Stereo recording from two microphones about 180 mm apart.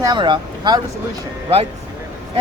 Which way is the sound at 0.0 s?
25° right (ahead or behind).